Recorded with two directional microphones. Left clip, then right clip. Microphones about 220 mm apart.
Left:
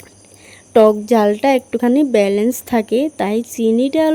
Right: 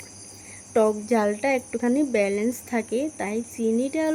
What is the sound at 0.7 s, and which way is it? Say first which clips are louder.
Speech: left 10 dB; 40° left (ahead or behind).